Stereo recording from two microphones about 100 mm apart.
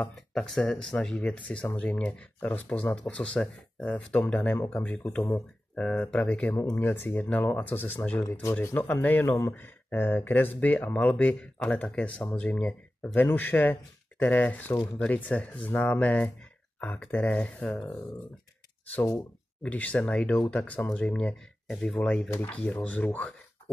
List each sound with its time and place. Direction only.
0.1 s a man's voice: 5° left (ahead or behind)
18.9 s a man's voice: 25° left (ahead or behind)